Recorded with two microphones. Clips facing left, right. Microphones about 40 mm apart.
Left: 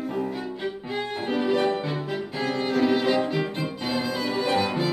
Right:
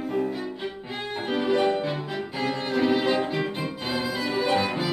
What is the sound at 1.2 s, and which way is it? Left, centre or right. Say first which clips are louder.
Violin: right 1 dB; centre.